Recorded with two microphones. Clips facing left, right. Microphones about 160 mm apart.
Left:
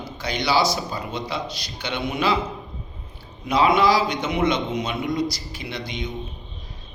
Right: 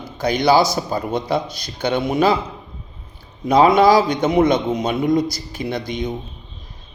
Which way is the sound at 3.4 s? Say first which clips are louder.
Right 6 dB; 45° right (ahead or behind).